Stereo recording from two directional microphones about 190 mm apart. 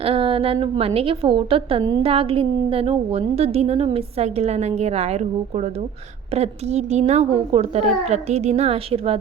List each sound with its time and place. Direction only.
0.0 s a woman's voice: 30° right (ahead or behind)